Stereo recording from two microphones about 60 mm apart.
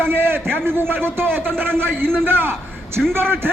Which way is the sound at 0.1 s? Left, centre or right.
Right.